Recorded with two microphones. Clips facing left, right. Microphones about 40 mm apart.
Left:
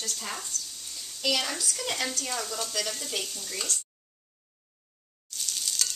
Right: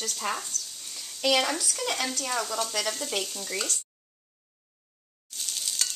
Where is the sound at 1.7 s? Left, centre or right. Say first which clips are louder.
Right 2 dB; centre.